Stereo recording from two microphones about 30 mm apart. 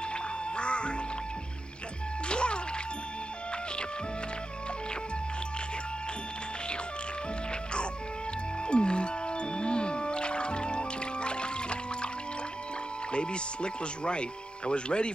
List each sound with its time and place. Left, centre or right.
0.1 s music: left
2.2 s music: left
8.6 s music: left
13.1 s speech: left